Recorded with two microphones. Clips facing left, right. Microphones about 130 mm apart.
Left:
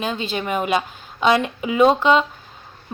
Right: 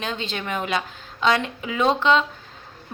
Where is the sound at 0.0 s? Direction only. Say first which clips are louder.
Left 4 dB; 10° left (ahead or behind).